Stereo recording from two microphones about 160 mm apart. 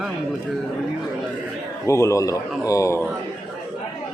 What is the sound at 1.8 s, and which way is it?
A man's voice, 20° left (ahead or behind).